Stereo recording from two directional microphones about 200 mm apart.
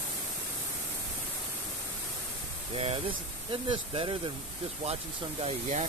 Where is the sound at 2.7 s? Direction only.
30° right (ahead or behind).